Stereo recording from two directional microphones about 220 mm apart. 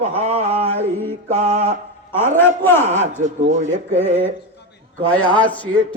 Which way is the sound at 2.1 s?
10° left (ahead or behind).